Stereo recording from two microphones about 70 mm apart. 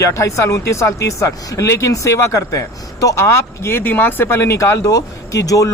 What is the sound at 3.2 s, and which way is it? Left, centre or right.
Speech, left.